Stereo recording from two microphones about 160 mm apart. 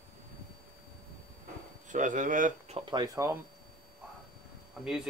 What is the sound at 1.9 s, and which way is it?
Speech, 55° right (ahead or behind).